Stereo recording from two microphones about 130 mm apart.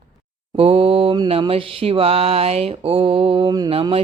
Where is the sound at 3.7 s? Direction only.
45° right (ahead or behind).